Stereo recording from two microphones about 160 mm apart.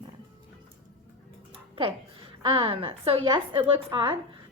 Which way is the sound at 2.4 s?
35° right (ahead or behind).